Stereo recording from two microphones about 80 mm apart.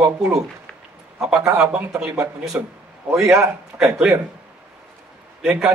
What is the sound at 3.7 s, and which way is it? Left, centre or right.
Speech, centre.